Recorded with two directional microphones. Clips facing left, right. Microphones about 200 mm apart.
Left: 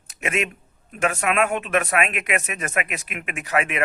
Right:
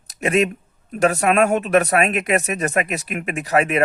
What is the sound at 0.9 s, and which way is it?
Speech, 40° right (ahead or behind).